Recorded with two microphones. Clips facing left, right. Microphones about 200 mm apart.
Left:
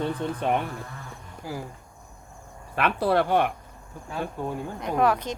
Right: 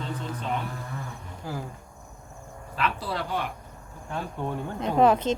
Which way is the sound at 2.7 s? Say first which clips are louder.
Left 7 dB; 60° left (ahead or behind).